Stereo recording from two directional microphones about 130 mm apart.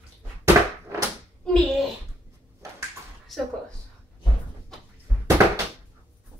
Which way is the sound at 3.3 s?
Centre (ahead or behind).